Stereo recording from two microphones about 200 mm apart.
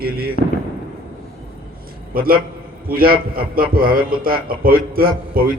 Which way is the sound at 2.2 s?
45° right (ahead or behind).